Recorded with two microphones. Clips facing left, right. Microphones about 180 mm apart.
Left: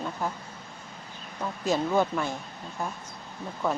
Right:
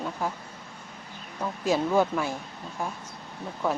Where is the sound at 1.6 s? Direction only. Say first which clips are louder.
Right 1 dB; 10° right (ahead or behind).